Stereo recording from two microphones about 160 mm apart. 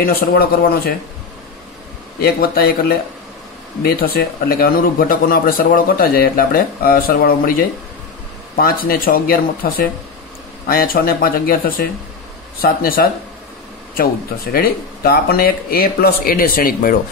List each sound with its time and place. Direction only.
0.0 s speech: 70° left (ahead or behind)
2.2 s speech: 70° left (ahead or behind)
12.6 s speech: 65° left (ahead or behind)
14.5 s speech: 70° left (ahead or behind)